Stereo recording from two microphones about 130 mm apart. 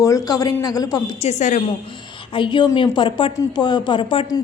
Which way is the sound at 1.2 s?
60° left (ahead or behind).